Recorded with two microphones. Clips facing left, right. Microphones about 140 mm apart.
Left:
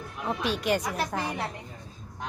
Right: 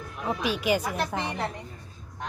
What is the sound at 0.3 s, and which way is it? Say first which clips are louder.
Speech: right 1 dB; 5° right (ahead or behind).